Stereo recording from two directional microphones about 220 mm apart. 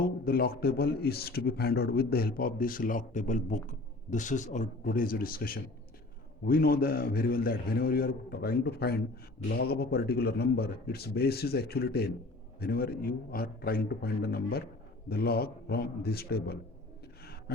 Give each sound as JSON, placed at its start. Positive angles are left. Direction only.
{"t": 0.3, "sound": "a man's voice", "side_deg": 45}